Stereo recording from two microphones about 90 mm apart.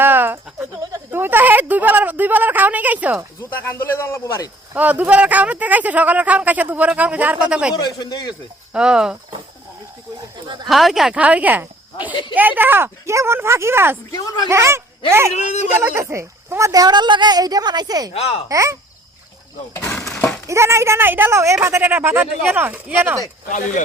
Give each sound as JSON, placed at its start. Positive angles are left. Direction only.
{"t": 0.0, "sound": "goat", "side_deg": -20}
{"t": 1.1, "sound": "speech", "side_deg": -25}
{"t": 3.5, "sound": "a man's voice", "side_deg": 20}
{"t": 4.7, "sound": "speech", "side_deg": -20}
{"t": 7.8, "sound": "speech", "side_deg": 50}
{"t": 8.7, "sound": "speech", "side_deg": -10}
{"t": 10.7, "sound": "speech", "side_deg": 0}
{"t": 11.2, "sound": "a woman's voice", "side_deg": -15}
{"t": 18.4, "sound": "speech", "side_deg": -35}
{"t": 20.5, "sound": "speech", "side_deg": -30}